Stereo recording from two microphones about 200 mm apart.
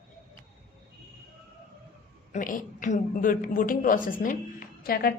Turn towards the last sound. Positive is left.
turn(degrees=50)  # may be behind; listen again after turning